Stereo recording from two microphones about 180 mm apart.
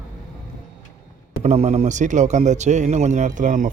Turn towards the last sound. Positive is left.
turn(degrees=-45)  # may be behind; listen again after turning